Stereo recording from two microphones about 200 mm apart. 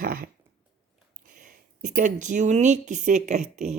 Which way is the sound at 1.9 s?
40° right (ahead or behind).